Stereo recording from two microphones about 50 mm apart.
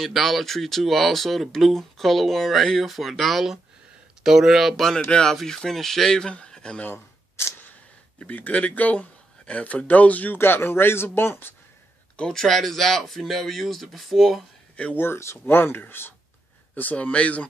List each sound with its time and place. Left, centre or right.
0.0 s speech: centre
4.7 s speech: centre
6.5 s a sound: centre
6.9 s camera: left
8.2 s speech: left
10.3 s speech: left
12.3 s speech: centre
15.0 s speech: left
15.5 s speech: left
16.7 s speech: left